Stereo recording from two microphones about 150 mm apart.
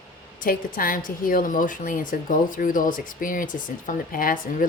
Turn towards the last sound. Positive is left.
turn(degrees=65)  # may be behind; listen again after turning